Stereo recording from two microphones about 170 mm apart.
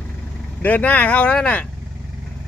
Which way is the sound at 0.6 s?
10° left (ahead or behind).